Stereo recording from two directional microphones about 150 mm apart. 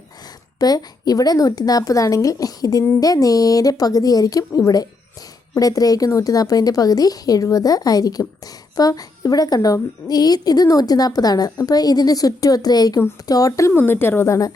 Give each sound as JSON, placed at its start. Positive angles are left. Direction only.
{"t": 0.6, "sound": "speech", "side_deg": 25}